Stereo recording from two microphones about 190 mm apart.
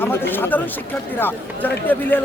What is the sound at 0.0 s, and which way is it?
Speech, 10° left (ahead or behind).